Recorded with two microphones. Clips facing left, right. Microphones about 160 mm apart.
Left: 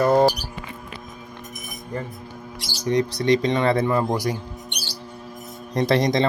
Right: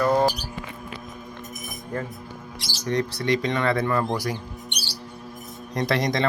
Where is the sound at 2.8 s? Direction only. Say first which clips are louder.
Left 4 dB; 15° left (ahead or behind).